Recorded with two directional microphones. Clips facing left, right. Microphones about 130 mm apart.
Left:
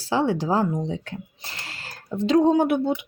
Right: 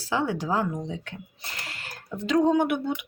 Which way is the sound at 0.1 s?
30° left (ahead or behind).